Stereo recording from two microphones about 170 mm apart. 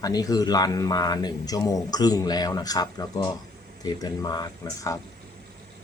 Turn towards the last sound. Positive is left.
turn(degrees=20)  # may be behind; listen again after turning